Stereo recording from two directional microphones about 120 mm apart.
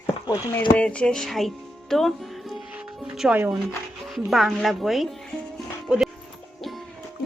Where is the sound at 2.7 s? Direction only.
10° right (ahead or behind).